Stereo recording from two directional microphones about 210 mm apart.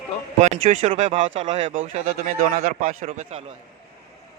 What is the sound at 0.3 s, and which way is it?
Speech, 35° right (ahead or behind).